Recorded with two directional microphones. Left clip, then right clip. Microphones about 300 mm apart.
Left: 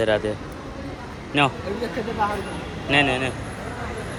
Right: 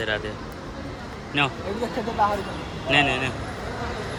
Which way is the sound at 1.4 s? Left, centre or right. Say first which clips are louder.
Left 3 dB; centre.